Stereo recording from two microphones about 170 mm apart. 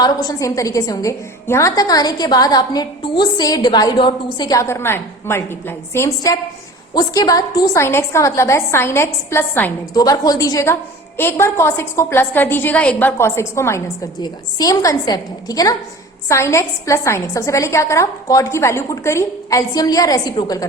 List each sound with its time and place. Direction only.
0.0 s a woman's voice: 20° left (ahead or behind)